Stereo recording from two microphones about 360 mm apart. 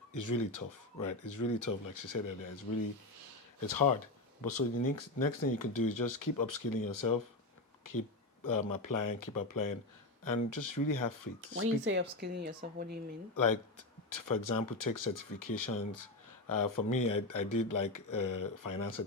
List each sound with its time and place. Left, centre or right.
0.1 s speech: left
3.7 s speech: left
8.4 s speech: left
11.5 s speech: right
13.3 s speech: left